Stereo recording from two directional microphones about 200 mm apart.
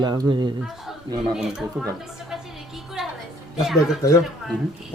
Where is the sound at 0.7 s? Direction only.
Centre (ahead or behind).